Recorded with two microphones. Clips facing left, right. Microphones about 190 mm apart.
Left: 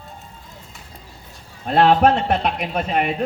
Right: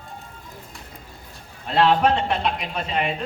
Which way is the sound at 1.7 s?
50° left (ahead or behind).